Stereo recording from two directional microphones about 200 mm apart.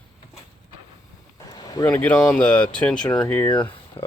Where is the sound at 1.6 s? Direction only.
20° left (ahead or behind).